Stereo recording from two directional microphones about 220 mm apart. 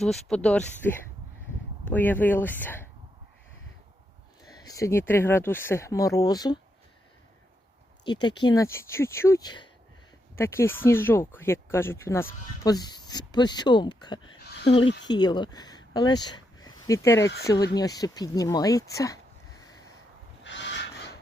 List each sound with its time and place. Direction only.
0.0 s speech: 5° left (ahead or behind)
4.6 s speech: 15° left (ahead or behind)
8.0 s speech: 20° left (ahead or behind)
20.4 s a sound: 55° left (ahead or behind)